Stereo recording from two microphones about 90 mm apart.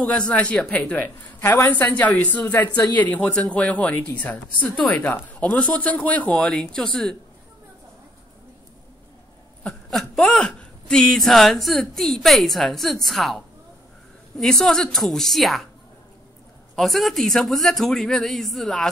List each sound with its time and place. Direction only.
0.3 s a woman's voice: 15° left (ahead or behind)
9.6 s a sound: 10° left (ahead or behind)
10.3 s speech: 10° left (ahead or behind)
16.7 s speech: centre (ahead or behind)